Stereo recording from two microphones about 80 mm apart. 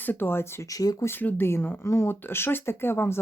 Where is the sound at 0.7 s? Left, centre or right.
Left.